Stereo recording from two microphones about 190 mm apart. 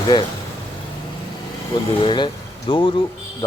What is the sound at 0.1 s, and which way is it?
Speech, 20° left (ahead or behind).